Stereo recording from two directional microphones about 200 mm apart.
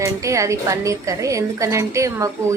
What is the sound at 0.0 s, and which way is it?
A woman's voice, 15° right (ahead or behind).